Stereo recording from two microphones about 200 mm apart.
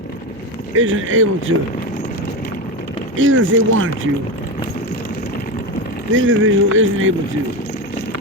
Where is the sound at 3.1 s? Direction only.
75° right (ahead or behind).